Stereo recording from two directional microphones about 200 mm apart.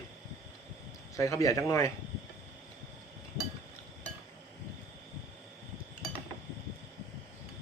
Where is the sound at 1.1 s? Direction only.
15° left (ahead or behind).